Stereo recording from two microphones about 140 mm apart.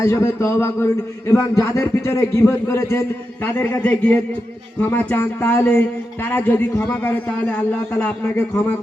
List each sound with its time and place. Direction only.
0.0 s a man's voice: 25° left (ahead or behind)